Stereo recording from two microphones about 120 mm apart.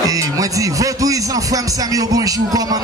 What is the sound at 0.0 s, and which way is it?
Speech, 30° right (ahead or behind).